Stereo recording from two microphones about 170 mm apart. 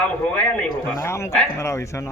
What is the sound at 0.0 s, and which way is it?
A man's voice, 5° left (ahead or behind).